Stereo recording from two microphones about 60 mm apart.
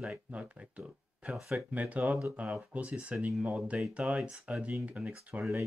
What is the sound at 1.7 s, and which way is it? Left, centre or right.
Speech, right.